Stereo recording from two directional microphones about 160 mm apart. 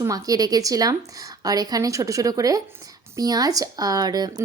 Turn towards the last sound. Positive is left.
turn(degrees=-25)  # may be behind; listen again after turning